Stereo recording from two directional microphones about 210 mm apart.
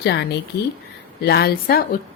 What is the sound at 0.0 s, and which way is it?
A woman's voice, 55° left (ahead or behind).